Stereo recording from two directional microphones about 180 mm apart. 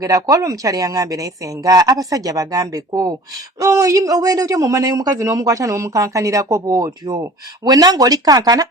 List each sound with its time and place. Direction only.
0.0 s a man's voice: 20° right (ahead or behind)